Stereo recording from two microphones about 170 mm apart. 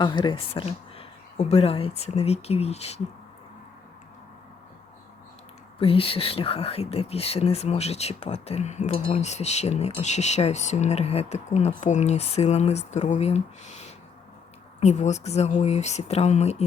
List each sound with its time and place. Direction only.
0.0 s speech: 25° left (ahead or behind)
5.8 s speech: 35° left (ahead or behind)
14.8 s speech: 40° left (ahead or behind)